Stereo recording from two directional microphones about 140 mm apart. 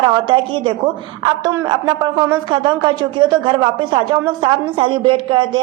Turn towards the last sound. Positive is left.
turn(degrees=-35)  # may be behind; listen again after turning